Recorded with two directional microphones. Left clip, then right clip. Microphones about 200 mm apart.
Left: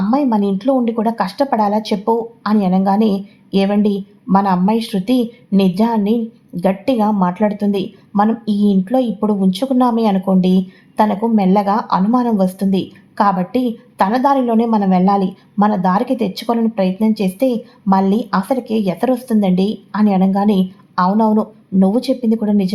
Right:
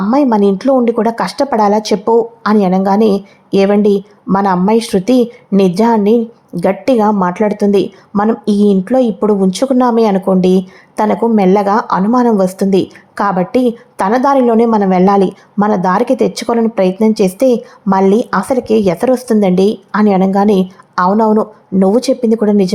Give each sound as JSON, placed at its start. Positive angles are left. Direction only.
{"t": 0.1, "sound": "a woman's voice", "side_deg": -25}